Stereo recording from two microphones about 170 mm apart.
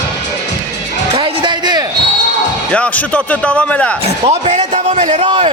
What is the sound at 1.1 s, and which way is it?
Music, 30° right (ahead or behind).